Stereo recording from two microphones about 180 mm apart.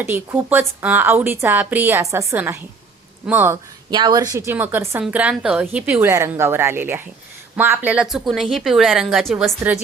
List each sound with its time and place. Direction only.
0.0 s a woman's voice: 15° right (ahead or behind)